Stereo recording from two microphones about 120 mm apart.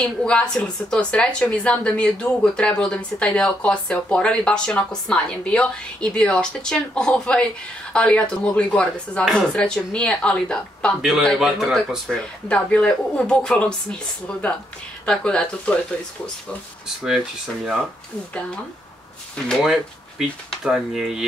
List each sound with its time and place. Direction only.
0.0 s a woman's voice: 5° left (ahead or behind)
11.2 s a woman's voice: 5° right (ahead or behind)
19.3 s speech: 5° left (ahead or behind)